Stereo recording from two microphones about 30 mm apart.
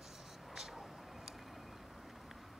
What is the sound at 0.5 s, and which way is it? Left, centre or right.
Vehicle, centre.